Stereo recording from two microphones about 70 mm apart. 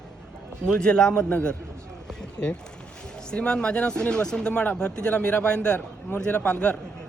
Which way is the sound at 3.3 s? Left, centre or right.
Centre.